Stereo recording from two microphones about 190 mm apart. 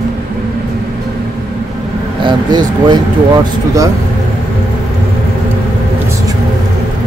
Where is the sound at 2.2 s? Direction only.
20° right (ahead or behind).